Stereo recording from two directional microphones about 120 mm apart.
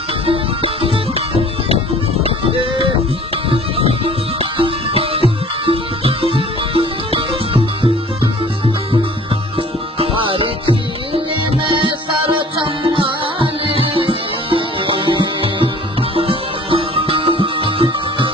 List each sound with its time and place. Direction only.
0.3 s music: 50° right (ahead or behind)
2.2 s music: 45° right (ahead or behind)
9.6 s music: 50° right (ahead or behind)
12.4 s music: 45° right (ahead or behind)